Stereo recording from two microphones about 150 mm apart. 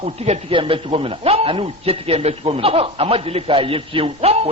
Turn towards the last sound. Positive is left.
turn(degrees=-40)  # may be behind; listen again after turning